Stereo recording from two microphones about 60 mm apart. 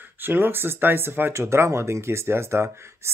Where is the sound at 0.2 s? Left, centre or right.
Right.